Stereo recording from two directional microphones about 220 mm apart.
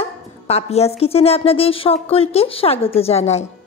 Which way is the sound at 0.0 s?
30° left (ahead or behind).